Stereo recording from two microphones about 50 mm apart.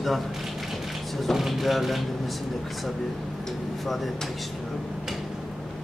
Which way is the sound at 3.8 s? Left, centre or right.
Centre.